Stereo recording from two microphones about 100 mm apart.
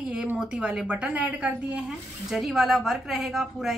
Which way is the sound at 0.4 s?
10° right (ahead or behind).